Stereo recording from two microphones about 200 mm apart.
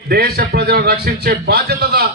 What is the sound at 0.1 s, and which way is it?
A man's voice, 50° right (ahead or behind).